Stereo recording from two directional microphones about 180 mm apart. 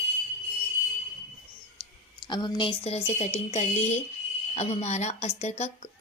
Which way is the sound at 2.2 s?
25° left (ahead or behind).